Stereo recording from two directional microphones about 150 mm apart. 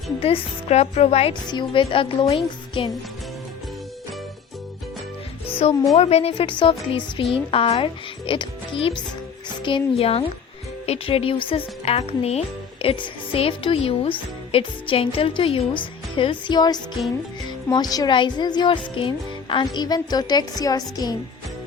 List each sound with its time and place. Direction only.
0.2 s a woman's voice: 45° left (ahead or behind)
5.6 s a woman's voice: 45° left (ahead or behind); by 21.2 s 25° left (ahead or behind)